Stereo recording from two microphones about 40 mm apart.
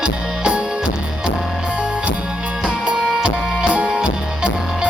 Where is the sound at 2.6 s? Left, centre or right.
Right.